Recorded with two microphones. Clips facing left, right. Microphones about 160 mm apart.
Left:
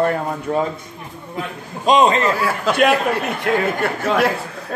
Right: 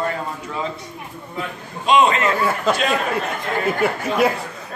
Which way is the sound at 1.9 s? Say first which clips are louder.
Left 2 dB; 35° left (ahead or behind).